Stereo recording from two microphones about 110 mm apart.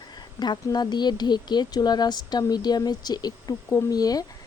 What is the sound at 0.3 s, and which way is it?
Speech, 40° left (ahead or behind).